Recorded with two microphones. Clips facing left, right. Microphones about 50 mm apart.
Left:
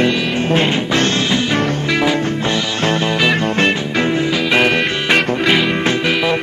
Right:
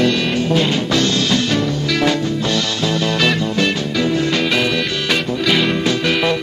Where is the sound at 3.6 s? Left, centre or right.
Left.